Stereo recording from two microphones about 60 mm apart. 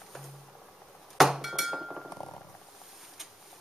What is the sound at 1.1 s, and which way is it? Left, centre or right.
Chink, centre.